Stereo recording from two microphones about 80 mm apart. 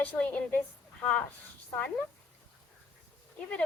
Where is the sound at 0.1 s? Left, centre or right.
Centre.